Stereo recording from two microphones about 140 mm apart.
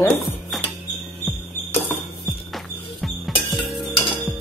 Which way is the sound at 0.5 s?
Centre (ahead or behind).